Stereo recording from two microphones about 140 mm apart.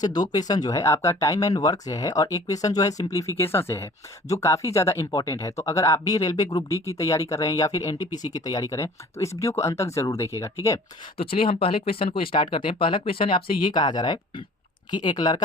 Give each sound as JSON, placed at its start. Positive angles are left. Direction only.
{"t": 0.0, "sound": "speech", "side_deg": 30}
{"t": 11.2, "sound": "speech", "side_deg": 40}